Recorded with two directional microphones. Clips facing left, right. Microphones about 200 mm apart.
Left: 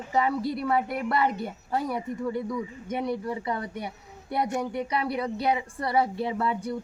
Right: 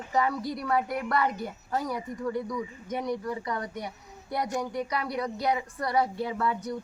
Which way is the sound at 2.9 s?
25° left (ahead or behind).